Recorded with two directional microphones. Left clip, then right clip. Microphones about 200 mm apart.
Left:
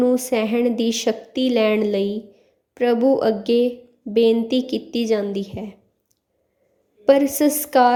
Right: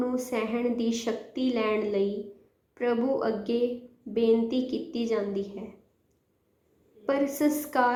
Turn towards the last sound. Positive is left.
turn(degrees=55)  # may be behind; listen again after turning